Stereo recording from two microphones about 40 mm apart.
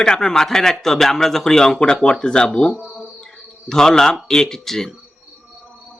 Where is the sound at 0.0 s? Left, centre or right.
Centre.